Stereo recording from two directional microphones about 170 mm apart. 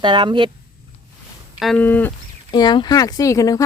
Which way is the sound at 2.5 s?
25° left (ahead or behind).